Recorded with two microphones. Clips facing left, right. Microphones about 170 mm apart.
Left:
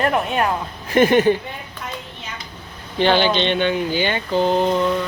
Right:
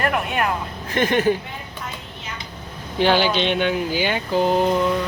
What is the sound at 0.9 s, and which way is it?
Speech, 10° left (ahead or behind).